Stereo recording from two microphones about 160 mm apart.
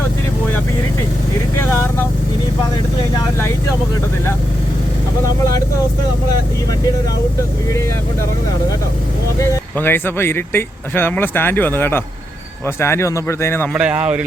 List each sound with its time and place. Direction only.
9.4 s speech: 15° left (ahead or behind)
13.7 s speech: 5° right (ahead or behind)